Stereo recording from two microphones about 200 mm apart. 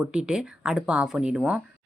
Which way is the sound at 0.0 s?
5° right (ahead or behind).